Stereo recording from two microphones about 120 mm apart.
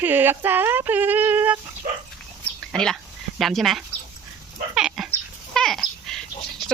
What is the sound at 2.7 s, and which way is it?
Speech, 5° left (ahead or behind).